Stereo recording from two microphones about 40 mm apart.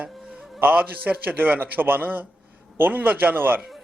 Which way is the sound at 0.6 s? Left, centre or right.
Right.